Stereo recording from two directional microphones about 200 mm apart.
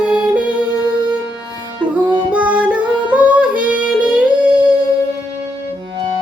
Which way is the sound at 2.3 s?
5° right (ahead or behind).